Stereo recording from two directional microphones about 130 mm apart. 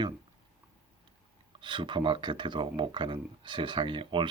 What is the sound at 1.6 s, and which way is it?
Speech, 40° right (ahead or behind).